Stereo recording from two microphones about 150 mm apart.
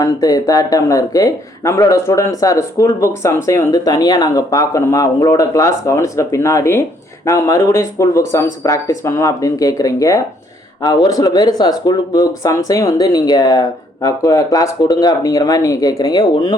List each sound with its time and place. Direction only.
0.0 s speech: 25° left (ahead or behind)